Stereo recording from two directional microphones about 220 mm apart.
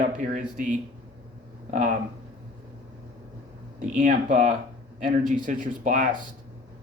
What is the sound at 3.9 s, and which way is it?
Speech, 35° right (ahead or behind).